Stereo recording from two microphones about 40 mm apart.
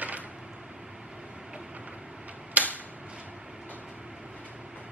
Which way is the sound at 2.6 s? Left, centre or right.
Right.